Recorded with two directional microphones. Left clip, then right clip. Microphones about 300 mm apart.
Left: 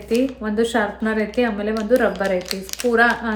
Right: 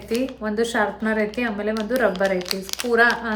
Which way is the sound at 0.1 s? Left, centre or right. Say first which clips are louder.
Left 4 dB; centre.